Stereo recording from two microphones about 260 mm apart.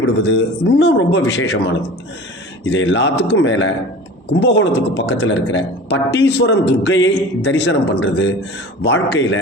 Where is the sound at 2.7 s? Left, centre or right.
Left.